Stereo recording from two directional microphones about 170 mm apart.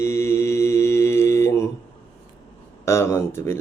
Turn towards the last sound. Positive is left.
turn(degrees=15)  # may be behind; listen again after turning